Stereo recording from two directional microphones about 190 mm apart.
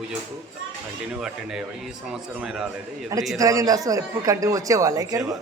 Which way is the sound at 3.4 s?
20° right (ahead or behind).